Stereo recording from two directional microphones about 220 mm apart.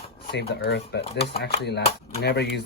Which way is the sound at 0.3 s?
50° left (ahead or behind).